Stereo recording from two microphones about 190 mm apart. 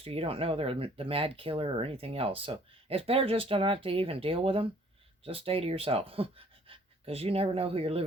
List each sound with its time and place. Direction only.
0.0 s speech: 30° right (ahead or behind)